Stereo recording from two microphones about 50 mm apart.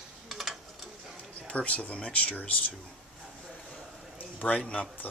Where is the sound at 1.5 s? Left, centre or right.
Left.